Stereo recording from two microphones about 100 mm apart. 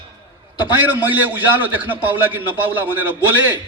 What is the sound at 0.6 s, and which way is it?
A man's voice, 20° right (ahead or behind).